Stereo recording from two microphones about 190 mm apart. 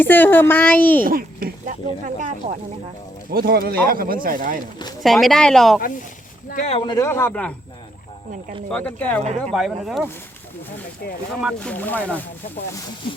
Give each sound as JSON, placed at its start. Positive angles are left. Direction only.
{"t": 0.0, "sound": "a woman's voice", "side_deg": 10}
{"t": 1.0, "sound": "speech", "side_deg": -50}
{"t": 3.3, "sound": "speech", "side_deg": -55}
{"t": 5.0, "sound": "speech", "side_deg": 0}
{"t": 6.5, "sound": "speech", "side_deg": 40}
{"t": 6.7, "sound": "a woman's voice", "side_deg": 20}
{"t": 8.7, "sound": "a woman's voice", "side_deg": 10}
{"t": 11.3, "sound": "speech", "side_deg": 0}
{"t": 11.7, "sound": "a woman's voice", "side_deg": 10}